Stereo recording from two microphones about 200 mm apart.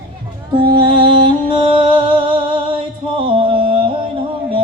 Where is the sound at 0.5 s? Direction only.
25° right (ahead or behind).